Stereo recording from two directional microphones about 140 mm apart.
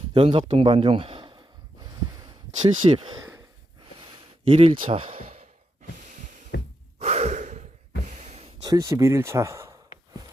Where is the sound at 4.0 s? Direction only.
40° right (ahead or behind).